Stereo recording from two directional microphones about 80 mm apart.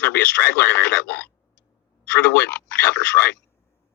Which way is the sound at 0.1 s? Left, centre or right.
Centre.